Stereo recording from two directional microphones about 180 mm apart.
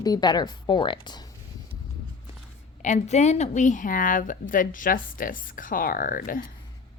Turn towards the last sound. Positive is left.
turn(degrees=50)  # may be behind; listen again after turning